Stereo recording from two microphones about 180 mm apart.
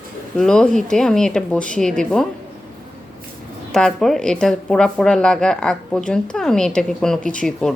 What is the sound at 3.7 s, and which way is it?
Speech, 5° left (ahead or behind).